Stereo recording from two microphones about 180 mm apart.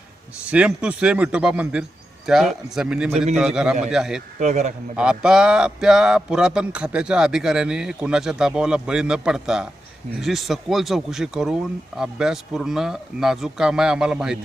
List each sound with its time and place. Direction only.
0.5 s speech: 5° right (ahead or behind)
4.4 s a man's voice: 40° right (ahead or behind)
4.9 s speech: 5° right (ahead or behind)